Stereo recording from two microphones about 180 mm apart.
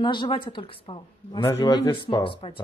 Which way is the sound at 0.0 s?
25° left (ahead or behind).